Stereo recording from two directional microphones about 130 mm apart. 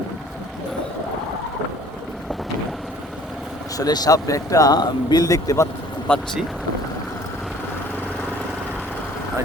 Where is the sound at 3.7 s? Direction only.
30° left (ahead or behind).